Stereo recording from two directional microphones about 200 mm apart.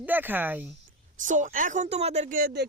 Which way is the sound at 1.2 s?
40° right (ahead or behind).